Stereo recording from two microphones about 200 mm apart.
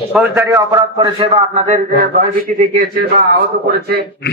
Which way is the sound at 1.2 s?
30° right (ahead or behind).